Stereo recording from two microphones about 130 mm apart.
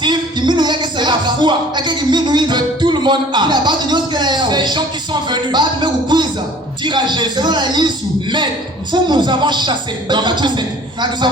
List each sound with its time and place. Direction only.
0.0 s a man's voice: 35° right (ahead or behind)